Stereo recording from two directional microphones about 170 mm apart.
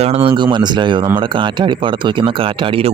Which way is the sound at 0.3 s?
25° right (ahead or behind).